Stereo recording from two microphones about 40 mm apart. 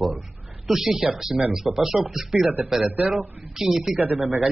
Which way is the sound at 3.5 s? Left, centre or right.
Centre.